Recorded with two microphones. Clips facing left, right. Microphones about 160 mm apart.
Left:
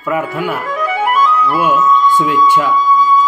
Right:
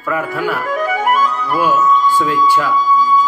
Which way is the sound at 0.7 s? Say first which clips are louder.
Even; 45° right (ahead or behind).